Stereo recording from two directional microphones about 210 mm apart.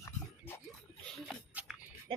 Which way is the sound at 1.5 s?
5° right (ahead or behind).